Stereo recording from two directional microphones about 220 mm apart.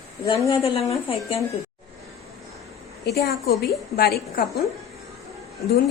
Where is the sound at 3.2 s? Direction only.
45° left (ahead or behind).